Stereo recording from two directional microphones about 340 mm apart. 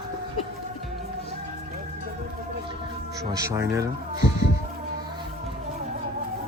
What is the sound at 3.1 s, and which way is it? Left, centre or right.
Speech, centre.